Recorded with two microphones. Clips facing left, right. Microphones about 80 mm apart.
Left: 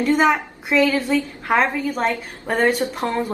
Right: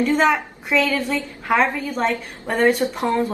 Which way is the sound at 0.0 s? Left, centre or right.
Centre.